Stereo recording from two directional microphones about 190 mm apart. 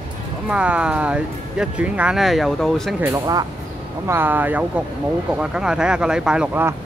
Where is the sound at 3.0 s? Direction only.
20° right (ahead or behind).